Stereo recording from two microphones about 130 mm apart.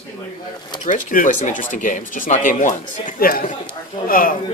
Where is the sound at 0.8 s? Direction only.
90° left.